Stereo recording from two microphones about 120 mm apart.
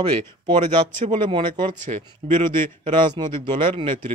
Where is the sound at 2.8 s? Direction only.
45° right (ahead or behind).